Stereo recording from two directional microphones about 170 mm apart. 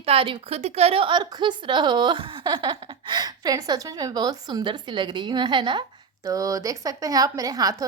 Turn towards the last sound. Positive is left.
turn(degrees=-20)  # may be behind; listen again after turning